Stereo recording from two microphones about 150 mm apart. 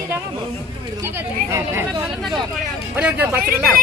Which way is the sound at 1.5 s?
15° right (ahead or behind).